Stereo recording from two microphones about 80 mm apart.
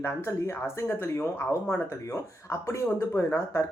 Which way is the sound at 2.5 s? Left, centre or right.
Left.